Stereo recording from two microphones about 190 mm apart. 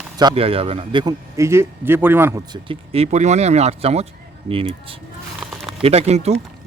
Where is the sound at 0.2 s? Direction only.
25° right (ahead or behind).